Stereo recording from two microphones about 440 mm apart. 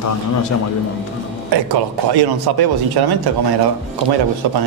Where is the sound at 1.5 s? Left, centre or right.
Right.